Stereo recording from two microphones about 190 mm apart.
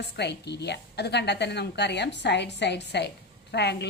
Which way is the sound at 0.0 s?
60° left (ahead or behind).